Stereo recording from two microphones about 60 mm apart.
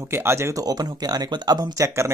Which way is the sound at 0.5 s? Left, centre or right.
Right.